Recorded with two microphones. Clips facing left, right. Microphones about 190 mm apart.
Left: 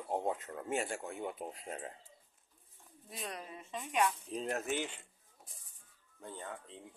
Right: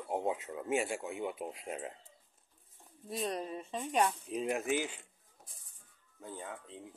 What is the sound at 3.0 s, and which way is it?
A woman's voice, 35° right (ahead or behind).